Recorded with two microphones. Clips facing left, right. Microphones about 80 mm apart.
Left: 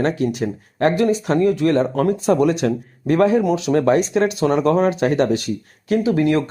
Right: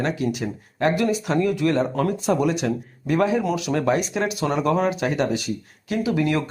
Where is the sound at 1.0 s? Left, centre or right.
Left.